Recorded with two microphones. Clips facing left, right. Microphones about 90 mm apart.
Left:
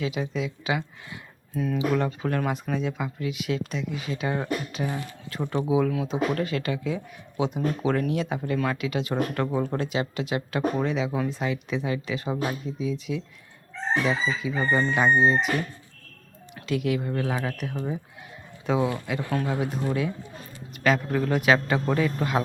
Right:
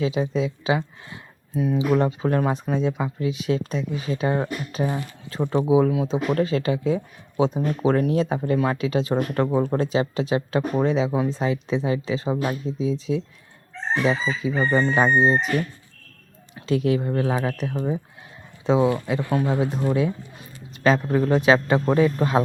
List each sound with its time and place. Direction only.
0.0 s a man's voice: 30° right (ahead or behind)
16.6 s a man's voice: 30° right (ahead or behind)